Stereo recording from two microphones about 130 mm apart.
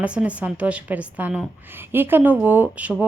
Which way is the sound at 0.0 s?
10° right (ahead or behind).